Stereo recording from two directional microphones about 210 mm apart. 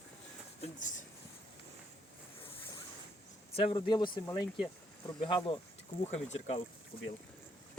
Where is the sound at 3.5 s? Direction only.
25° left (ahead or behind).